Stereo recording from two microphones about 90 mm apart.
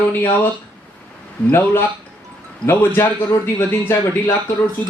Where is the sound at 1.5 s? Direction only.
25° left (ahead or behind).